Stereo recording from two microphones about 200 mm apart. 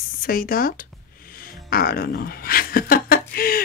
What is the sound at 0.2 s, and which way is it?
Speech, 45° left (ahead or behind).